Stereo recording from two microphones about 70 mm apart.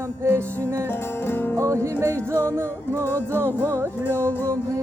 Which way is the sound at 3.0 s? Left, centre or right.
Left.